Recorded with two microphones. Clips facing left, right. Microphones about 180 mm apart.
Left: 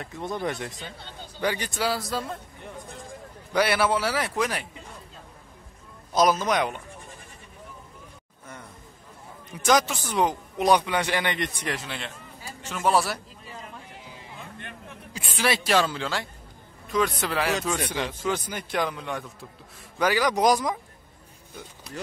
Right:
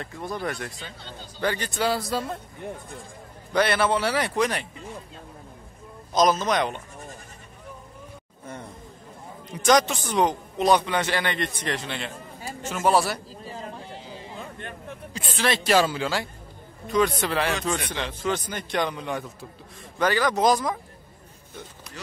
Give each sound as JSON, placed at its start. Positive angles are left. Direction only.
{"t": 0.2, "sound": "a man's voice", "side_deg": 20}
{"t": 3.5, "sound": "a man's voice", "side_deg": 10}
{"t": 6.1, "sound": "a man's voice", "side_deg": 10}
{"t": 9.7, "sound": "a man's voice", "side_deg": 5}
{"t": 13.3, "sound": "a sound", "side_deg": -30}
{"t": 15.1, "sound": "a man's voice", "side_deg": 10}
{"t": 15.7, "sound": "a man's voice", "side_deg": -5}
{"t": 20.0, "sound": "a man's voice", "side_deg": 10}